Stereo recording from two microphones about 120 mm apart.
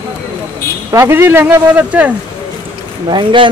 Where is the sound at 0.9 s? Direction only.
20° right (ahead or behind).